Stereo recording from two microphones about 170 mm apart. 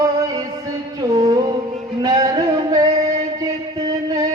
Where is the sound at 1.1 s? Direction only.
20° right (ahead or behind).